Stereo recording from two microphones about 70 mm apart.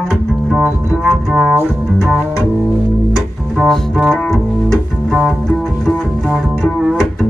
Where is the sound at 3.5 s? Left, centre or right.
Centre.